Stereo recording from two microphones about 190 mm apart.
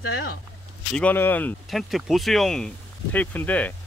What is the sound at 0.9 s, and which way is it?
Speech, 10° left (ahead or behind).